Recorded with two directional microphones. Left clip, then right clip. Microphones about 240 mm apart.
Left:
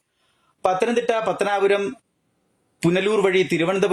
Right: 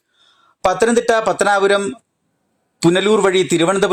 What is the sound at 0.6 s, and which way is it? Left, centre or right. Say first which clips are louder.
A man's voice: right 6 dB; right.